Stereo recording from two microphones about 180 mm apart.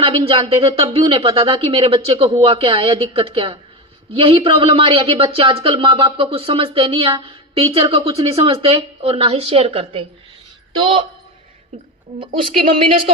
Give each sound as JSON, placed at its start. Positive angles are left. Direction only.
{"t": 0.0, "sound": "speech", "side_deg": -30}
{"t": 11.7, "sound": "a woman's voice", "side_deg": -30}